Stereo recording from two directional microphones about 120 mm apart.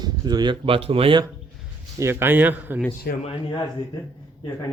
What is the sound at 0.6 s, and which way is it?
Speech, 50° right (ahead or behind).